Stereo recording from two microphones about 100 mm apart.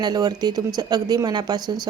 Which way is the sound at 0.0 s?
40° right (ahead or behind).